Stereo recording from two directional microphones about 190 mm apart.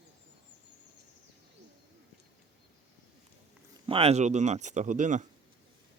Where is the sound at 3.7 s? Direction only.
30° right (ahead or behind).